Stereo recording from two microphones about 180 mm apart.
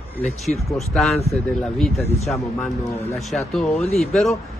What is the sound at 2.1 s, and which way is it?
Speech, 15° left (ahead or behind).